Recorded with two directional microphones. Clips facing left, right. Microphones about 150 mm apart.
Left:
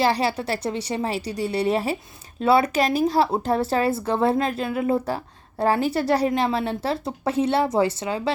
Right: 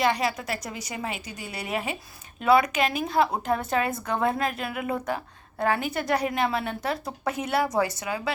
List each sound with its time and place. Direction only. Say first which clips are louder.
0.0 s a woman's voice: left 3 dB; 30° left (ahead or behind)